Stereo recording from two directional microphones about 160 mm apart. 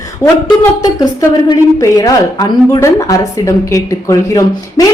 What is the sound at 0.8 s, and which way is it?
A woman's voice, 25° left (ahead or behind).